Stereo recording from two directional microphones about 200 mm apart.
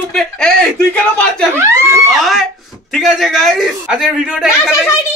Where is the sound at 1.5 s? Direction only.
10° right (ahead or behind).